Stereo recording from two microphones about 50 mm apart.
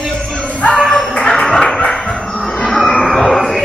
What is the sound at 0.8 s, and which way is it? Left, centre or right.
Music, centre.